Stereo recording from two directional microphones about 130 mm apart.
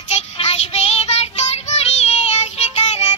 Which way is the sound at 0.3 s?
55° left (ahead or behind).